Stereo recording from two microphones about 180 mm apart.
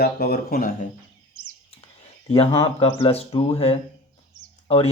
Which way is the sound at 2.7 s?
30° left (ahead or behind).